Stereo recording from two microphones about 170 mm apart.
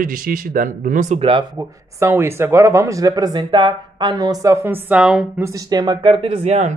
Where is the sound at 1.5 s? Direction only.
15° right (ahead or behind).